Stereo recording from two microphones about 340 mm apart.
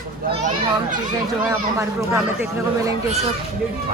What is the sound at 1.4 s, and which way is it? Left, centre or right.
Speech, centre.